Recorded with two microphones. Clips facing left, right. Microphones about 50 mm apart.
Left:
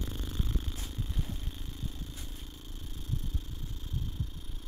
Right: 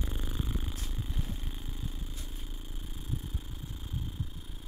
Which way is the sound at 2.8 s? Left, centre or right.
Centre.